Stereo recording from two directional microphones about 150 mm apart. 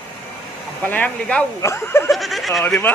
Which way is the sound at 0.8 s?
10° left (ahead or behind).